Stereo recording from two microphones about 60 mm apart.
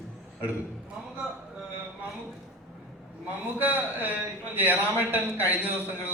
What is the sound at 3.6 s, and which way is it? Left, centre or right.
A man's voice, right.